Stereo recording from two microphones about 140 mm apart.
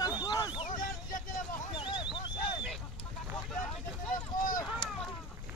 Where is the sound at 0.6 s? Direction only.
65° left (ahead or behind).